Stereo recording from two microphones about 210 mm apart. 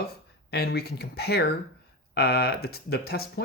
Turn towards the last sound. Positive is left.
turn(degrees=45)  # may be behind; listen again after turning